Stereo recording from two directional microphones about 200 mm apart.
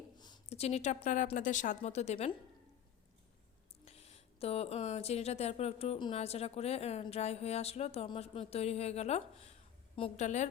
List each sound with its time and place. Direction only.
0.2 s speech: 25° left (ahead or behind)
3.8 s speech: 30° left (ahead or behind)